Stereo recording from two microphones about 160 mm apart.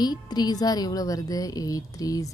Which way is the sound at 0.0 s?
25° left (ahead or behind).